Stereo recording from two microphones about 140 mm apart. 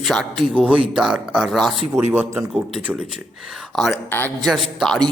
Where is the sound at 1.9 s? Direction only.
15° right (ahead or behind).